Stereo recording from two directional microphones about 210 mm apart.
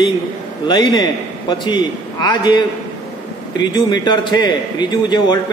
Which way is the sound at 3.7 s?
20° left (ahead or behind).